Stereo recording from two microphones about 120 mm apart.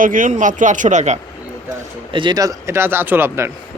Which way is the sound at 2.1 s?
45° right (ahead or behind).